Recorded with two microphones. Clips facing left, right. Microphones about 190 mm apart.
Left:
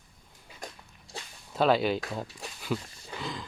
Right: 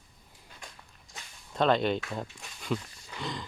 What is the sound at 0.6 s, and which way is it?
Dog, 40° left (ahead or behind).